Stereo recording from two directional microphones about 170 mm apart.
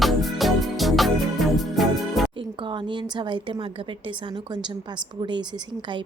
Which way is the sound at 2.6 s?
30° right (ahead or behind).